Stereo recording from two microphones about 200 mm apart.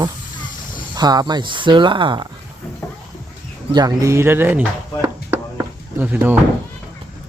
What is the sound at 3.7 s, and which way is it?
Speech, 15° right (ahead or behind).